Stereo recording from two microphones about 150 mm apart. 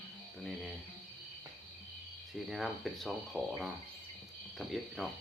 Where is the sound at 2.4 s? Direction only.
Centre (ahead or behind).